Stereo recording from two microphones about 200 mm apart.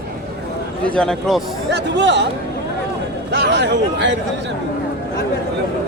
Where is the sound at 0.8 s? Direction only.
5° left (ahead or behind).